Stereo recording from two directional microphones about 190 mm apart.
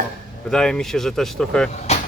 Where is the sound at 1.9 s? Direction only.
35° left (ahead or behind).